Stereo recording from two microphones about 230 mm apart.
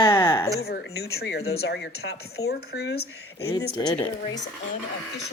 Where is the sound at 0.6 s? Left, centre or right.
Left.